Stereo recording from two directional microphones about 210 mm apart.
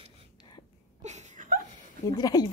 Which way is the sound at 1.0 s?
35° right (ahead or behind).